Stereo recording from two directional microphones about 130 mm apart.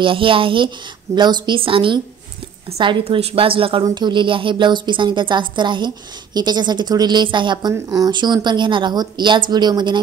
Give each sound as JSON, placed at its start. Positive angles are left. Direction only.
{"t": 0.0, "sound": "a woman's voice", "side_deg": -40}